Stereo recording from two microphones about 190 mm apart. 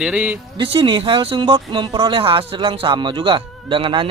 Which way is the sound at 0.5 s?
25° right (ahead or behind).